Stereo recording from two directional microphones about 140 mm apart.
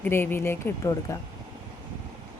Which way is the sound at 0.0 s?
15° left (ahead or behind).